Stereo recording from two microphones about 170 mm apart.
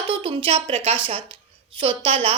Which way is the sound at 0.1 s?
30° right (ahead or behind).